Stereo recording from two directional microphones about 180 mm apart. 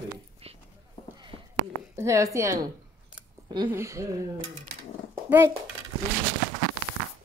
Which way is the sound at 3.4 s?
20° right (ahead or behind).